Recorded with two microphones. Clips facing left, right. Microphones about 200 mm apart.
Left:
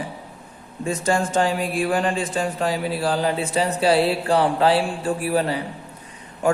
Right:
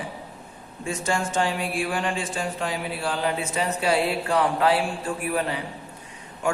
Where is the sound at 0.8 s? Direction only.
35° left (ahead or behind).